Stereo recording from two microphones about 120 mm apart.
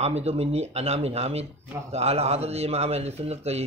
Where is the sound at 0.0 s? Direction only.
60° right (ahead or behind).